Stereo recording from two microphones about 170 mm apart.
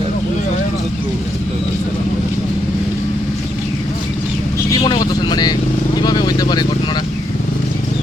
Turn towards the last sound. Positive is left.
turn(degrees=25)  # may be behind; listen again after turning